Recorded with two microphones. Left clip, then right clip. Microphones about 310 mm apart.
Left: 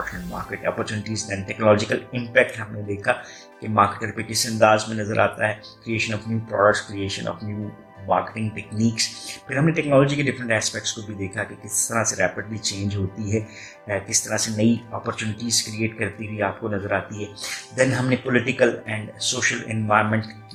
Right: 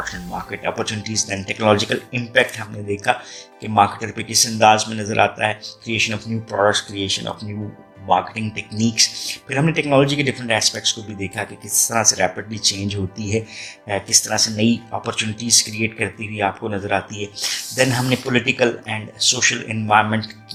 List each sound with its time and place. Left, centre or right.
0.0 s speech: right